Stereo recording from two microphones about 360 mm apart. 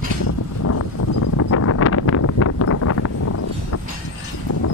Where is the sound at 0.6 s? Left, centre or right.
Left.